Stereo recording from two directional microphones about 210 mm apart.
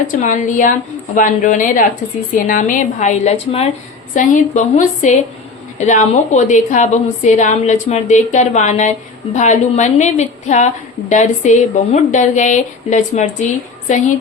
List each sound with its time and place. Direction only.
0.1 s a woman's voice: 35° left (ahead or behind)